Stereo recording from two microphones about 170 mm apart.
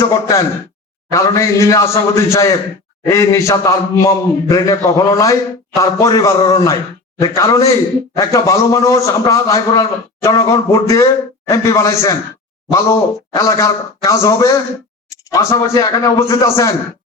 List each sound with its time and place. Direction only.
0.0 s a man's voice: 20° left (ahead or behind)